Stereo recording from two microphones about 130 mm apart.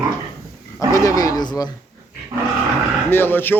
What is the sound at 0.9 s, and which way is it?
Speech, 25° left (ahead or behind).